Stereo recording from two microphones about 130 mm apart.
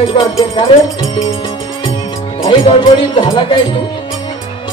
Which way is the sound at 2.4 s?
40° left (ahead or behind).